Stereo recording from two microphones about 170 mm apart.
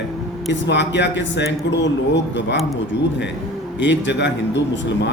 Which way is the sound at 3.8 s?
90° left.